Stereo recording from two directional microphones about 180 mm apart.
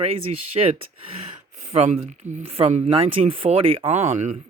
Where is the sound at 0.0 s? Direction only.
35° right (ahead or behind).